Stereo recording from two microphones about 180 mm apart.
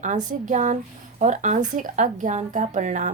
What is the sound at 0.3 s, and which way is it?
Speech, 45° right (ahead or behind).